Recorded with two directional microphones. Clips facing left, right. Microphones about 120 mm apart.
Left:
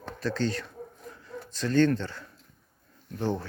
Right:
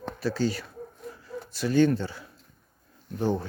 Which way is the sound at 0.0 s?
10° right (ahead or behind).